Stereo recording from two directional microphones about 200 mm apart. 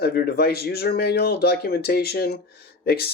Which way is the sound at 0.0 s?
50° left (ahead or behind).